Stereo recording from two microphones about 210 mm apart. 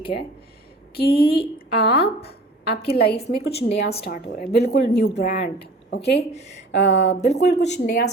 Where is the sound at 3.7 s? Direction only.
50° left (ahead or behind).